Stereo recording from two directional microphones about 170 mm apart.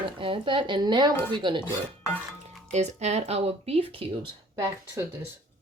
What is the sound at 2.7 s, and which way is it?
Speech, 40° right (ahead or behind).